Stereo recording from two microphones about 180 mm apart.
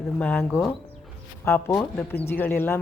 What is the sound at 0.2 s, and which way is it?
A man's voice, 10° left (ahead or behind).